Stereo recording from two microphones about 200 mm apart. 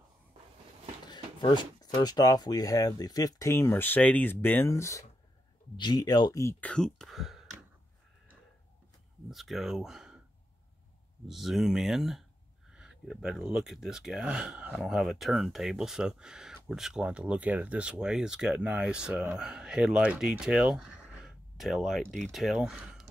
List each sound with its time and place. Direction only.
1.0 s speech: 20° left (ahead or behind); by 7.4 s centre (ahead or behind)
9.3 s speech: centre (ahead or behind)
11.2 s speech: centre (ahead or behind)